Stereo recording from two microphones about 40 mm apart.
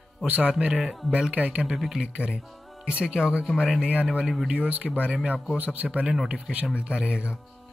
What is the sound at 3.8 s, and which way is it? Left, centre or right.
Speech, right.